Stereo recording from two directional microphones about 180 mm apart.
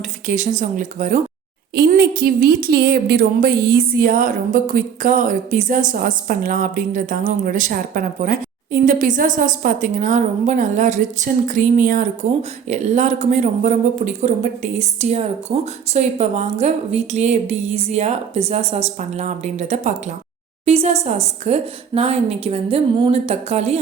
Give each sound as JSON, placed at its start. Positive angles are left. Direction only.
{"t": 0.3, "sound": "speech", "side_deg": -45}
{"t": 1.7, "sound": "speech", "side_deg": -60}
{"t": 4.0, "sound": "a woman's voice", "side_deg": -45}